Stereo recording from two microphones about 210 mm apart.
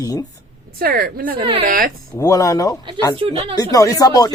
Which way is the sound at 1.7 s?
45° right (ahead or behind).